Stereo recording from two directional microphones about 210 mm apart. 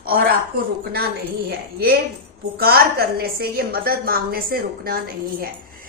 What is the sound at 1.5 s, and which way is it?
A woman's voice, 50° right (ahead or behind).